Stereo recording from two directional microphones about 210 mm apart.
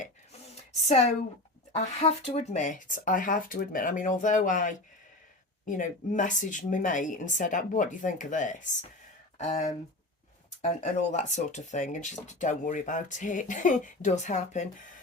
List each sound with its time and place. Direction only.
1.7 s speech: 30° left (ahead or behind)